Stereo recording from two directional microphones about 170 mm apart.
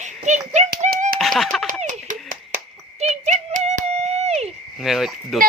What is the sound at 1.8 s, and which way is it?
Clapping, 45° right (ahead or behind).